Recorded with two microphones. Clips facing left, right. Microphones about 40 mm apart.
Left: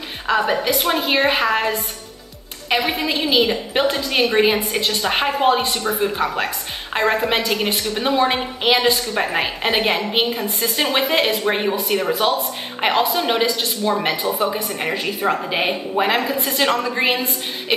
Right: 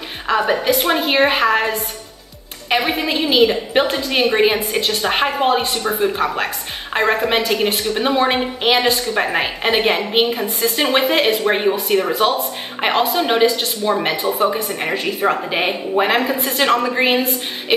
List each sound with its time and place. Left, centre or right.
0.3 s a woman's voice: centre